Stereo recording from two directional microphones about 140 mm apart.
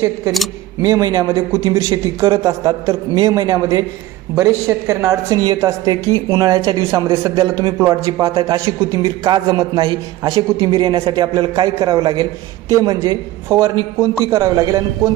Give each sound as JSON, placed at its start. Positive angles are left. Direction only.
{"t": 0.8, "sound": "a man's voice", "side_deg": -25}